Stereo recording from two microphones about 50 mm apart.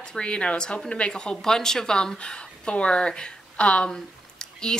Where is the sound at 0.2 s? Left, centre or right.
Left.